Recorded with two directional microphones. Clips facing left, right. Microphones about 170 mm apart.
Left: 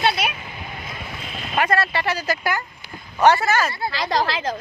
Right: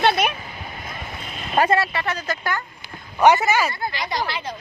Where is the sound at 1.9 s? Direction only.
Centre (ahead or behind).